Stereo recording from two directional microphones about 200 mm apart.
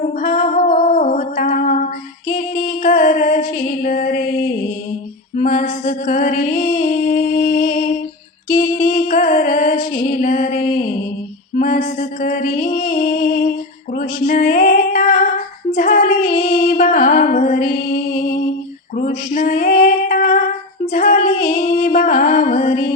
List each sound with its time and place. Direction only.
0.2 s music: 45° left (ahead or behind)
13.9 s female singing: 45° left (ahead or behind)
15.7 s music: 45° left (ahead or behind)
18.9 s female singing: 40° left (ahead or behind)
20.9 s music: 45° left (ahead or behind)